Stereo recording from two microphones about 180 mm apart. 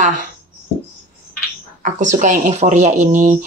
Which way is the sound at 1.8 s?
45° right (ahead or behind).